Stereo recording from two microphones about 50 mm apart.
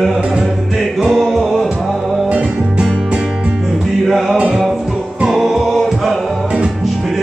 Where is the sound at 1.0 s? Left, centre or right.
Centre.